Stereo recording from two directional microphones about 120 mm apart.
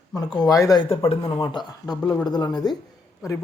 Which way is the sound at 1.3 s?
40° left (ahead or behind).